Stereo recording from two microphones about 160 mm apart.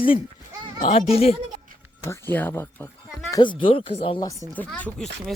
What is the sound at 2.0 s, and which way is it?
Speech, 15° left (ahead or behind).